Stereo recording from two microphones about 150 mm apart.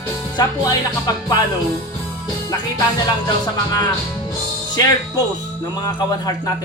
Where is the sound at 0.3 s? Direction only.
25° left (ahead or behind).